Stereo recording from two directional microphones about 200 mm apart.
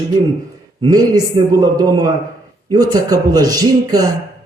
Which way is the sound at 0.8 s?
20° right (ahead or behind).